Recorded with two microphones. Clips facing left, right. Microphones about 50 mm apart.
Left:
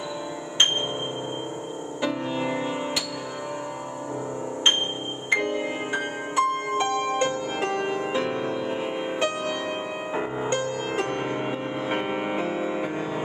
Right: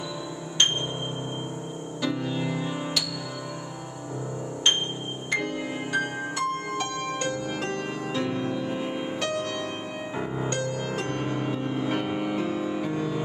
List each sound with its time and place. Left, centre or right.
2.0 s music: left
5.3 s music: left